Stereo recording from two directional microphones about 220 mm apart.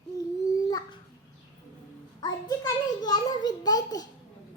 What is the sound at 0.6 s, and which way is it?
Babbling, 15° left (ahead or behind).